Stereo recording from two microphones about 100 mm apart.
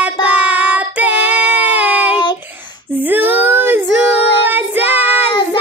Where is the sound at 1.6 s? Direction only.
15° right (ahead or behind).